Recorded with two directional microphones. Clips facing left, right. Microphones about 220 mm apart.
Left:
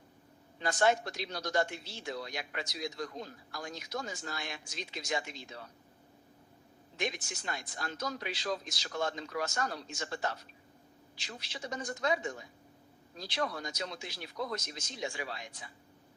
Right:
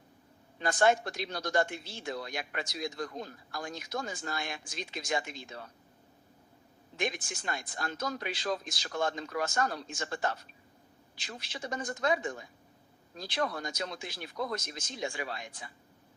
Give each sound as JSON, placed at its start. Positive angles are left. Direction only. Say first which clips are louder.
{"t": 0.6, "sound": "speech", "louder": "right 2 dB", "side_deg": -55}
{"t": 6.9, "sound": "speech", "louder": "right 2 dB", "side_deg": -50}